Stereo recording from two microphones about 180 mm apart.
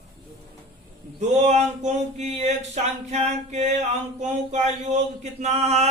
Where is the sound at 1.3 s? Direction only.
40° right (ahead or behind).